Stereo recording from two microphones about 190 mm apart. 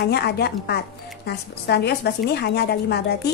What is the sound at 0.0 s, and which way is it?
A woman's voice, 60° left (ahead or behind).